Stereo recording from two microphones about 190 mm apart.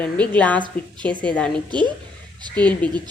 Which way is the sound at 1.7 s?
25° right (ahead or behind).